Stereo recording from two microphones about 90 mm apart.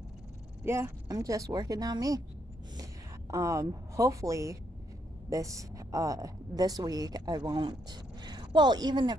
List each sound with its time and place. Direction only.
0.7 s speech: 30° right (ahead or behind)
1.0 s a woman's voice: 40° right (ahead or behind)